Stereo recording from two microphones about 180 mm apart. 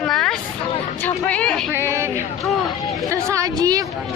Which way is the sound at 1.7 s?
15° right (ahead or behind).